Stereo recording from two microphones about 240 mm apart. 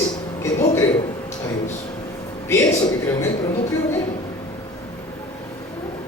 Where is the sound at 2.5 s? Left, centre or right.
Centre.